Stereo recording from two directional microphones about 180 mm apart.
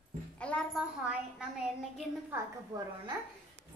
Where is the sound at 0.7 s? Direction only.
5° right (ahead or behind).